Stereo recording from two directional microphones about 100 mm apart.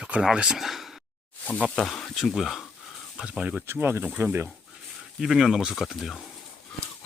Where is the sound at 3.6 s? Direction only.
20° right (ahead or behind).